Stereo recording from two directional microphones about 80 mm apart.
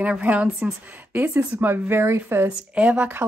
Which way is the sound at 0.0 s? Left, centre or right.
Centre.